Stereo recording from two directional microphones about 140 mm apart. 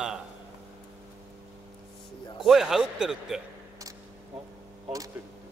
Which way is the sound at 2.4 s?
5° right (ahead or behind).